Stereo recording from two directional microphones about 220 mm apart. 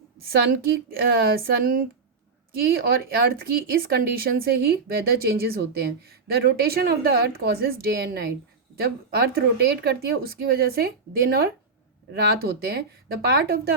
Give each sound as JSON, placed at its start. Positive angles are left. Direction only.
{"t": 0.3, "sound": "speech", "side_deg": -45}